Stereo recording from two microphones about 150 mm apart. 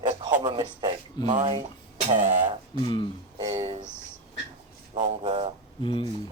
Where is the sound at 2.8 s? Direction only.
30° left (ahead or behind).